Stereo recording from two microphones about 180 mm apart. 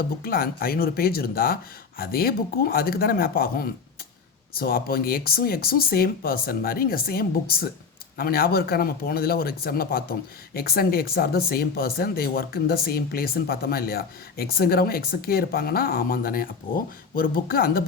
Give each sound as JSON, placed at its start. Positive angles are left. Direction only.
{"t": 0.2, "sound": "speech", "side_deg": 55}